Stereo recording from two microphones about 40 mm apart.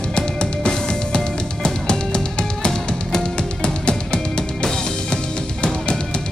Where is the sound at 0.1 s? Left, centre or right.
Left.